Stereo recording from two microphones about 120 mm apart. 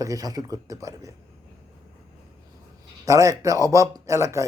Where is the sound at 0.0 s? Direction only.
30° right (ahead or behind).